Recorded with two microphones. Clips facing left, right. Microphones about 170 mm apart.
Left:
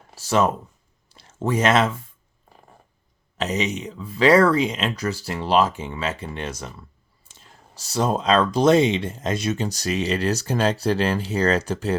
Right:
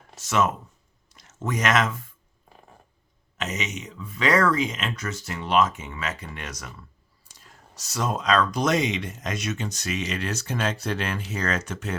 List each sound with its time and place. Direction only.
0.2 s speech: 35° left (ahead or behind)
3.3 s speech: 35° left (ahead or behind)